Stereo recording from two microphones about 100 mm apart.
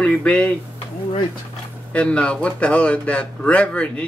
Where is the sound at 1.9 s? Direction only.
10° left (ahead or behind).